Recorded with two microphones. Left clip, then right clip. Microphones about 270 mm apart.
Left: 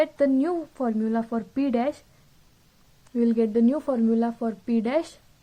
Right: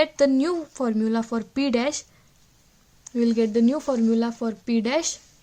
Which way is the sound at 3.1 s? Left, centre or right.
Right.